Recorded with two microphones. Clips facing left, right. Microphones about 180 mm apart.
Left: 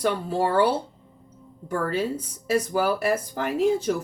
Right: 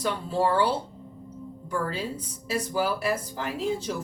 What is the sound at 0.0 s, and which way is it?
Speech, 55° left (ahead or behind).